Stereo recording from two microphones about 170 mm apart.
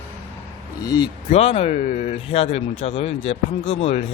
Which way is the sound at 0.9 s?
25° left (ahead or behind).